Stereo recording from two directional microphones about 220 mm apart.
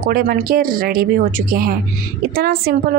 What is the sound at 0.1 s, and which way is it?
A woman's voice, 40° right (ahead or behind).